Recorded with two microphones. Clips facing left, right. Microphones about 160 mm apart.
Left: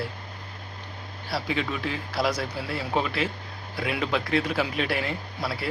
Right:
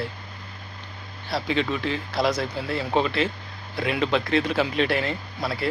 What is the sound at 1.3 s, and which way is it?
Speech, 10° left (ahead or behind).